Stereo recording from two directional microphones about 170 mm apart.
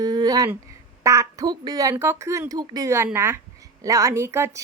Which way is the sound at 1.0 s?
20° right (ahead or behind).